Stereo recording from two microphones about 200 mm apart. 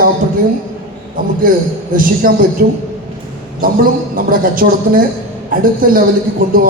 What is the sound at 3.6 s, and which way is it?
A man's voice, 45° right (ahead or behind).